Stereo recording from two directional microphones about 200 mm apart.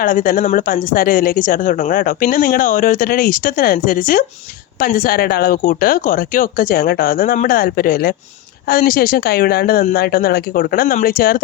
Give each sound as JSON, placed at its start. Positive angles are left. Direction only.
{"t": 0.0, "sound": "speech", "side_deg": 45}